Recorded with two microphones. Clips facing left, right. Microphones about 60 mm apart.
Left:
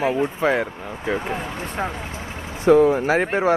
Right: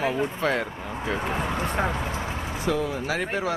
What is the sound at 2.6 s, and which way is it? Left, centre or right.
Speech, left.